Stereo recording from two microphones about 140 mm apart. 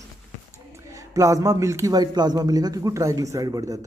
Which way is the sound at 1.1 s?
25° right (ahead or behind).